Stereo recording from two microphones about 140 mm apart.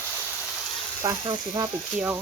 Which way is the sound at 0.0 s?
10° right (ahead or behind).